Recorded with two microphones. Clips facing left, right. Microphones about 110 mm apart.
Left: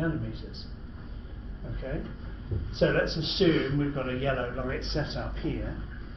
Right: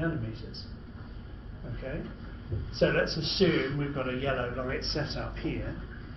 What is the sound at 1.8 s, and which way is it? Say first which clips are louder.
Speech: left 2 dB; centre (ahead or behind).